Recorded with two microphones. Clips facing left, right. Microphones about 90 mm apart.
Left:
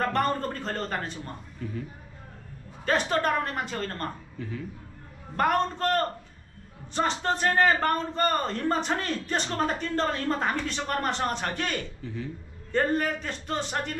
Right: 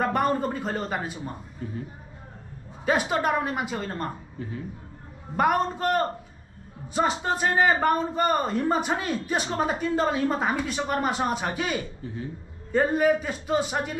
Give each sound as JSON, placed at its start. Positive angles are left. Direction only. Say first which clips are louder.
{"t": 0.0, "sound": "a man's voice", "louder": "right 2 dB", "side_deg": -10}
{"t": 1.6, "sound": "speech", "louder": "even", "side_deg": -30}
{"t": 2.8, "sound": "a man's voice", "louder": "right 1 dB", "side_deg": -10}
{"t": 4.4, "sound": "speech", "louder": "even", "side_deg": -25}
{"t": 5.3, "sound": "a man's voice", "louder": "right 2 dB", "side_deg": -10}